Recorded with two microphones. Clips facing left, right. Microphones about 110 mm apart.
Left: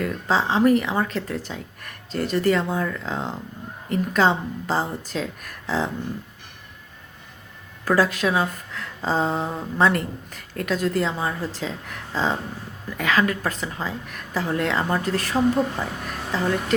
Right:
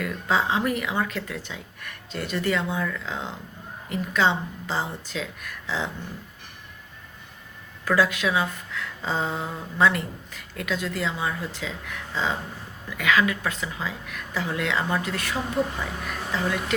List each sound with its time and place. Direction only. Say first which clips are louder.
0.0 s speech: left 2 dB; 35° left (ahead or behind)
7.9 s speech: left 2 dB; 40° left (ahead or behind)
9.9 s speech: left 5 dB; 45° left (ahead or behind)